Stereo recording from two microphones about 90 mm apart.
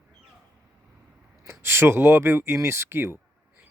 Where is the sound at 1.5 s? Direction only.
25° right (ahead or behind).